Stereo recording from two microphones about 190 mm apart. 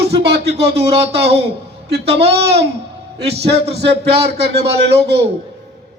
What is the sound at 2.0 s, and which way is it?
Speech, 35° right (ahead or behind).